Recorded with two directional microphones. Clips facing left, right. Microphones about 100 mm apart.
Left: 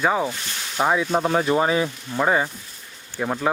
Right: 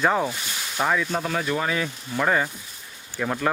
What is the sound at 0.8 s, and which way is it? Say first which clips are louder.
Speech: left 4 dB; 20° left (ahead or behind).